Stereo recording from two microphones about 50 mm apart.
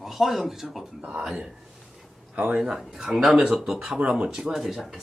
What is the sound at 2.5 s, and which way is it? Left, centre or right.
Speech, centre.